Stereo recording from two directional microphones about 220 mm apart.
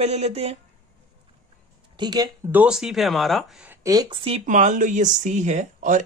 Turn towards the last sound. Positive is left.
turn(degrees=-35)  # may be behind; listen again after turning